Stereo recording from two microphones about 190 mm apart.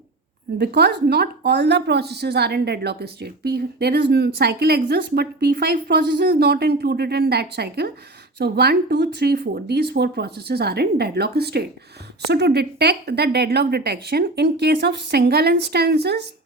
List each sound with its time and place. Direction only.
0.6 s a woman's voice: 60° right (ahead or behind)